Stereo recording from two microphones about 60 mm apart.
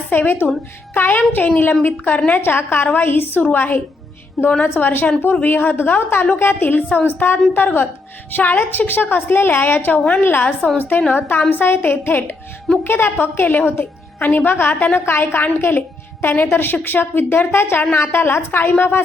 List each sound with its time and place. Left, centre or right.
0.1 s a woman's voice: left
2.4 s a woman's voice: left
4.9 s a woman's voice: left